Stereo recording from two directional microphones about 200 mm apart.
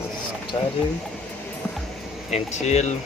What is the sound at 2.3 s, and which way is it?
Speech, 35° left (ahead or behind).